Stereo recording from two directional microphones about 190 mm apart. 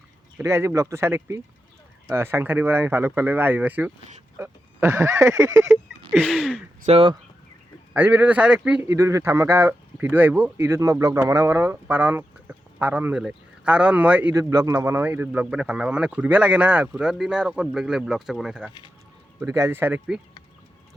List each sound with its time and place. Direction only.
0.3 s speech: 15° right (ahead or behind)
5.6 s a sound: centre (ahead or behind)
6.8 s speech: 35° right (ahead or behind)
7.9 s speech: 10° right (ahead or behind)